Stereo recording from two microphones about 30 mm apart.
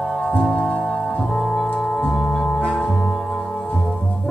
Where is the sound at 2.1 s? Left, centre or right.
Left.